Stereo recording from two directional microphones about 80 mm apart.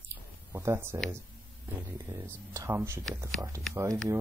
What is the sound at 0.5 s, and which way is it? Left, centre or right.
Speech, right.